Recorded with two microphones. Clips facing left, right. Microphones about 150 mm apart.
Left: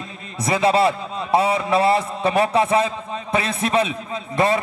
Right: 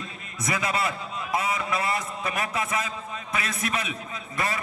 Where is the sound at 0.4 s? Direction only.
30° left (ahead or behind).